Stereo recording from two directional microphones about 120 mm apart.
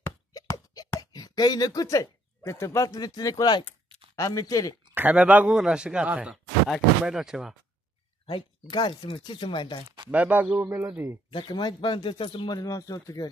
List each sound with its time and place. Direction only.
1.1 s speech: 30° left (ahead or behind)
4.9 s a man's voice: 10° right (ahead or behind)
8.3 s speech: 45° left (ahead or behind)
10.1 s a man's voice: 10° right (ahead or behind)
11.2 s speech: 40° left (ahead or behind)
12.4 s speech: 30° left (ahead or behind)